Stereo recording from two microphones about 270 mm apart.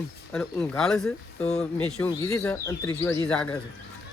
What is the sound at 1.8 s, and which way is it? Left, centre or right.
Speech, centre.